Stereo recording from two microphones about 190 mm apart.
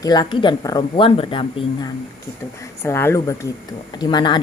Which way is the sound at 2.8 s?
15° left (ahead or behind).